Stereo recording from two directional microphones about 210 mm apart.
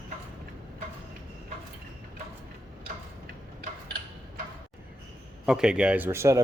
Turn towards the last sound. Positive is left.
turn(degrees=-15)  # may be behind; listen again after turning